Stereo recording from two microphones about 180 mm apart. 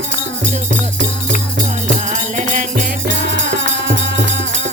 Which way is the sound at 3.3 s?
70° right (ahead or behind).